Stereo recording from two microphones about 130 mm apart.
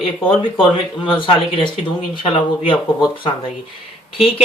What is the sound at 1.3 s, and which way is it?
Speech, 40° left (ahead or behind).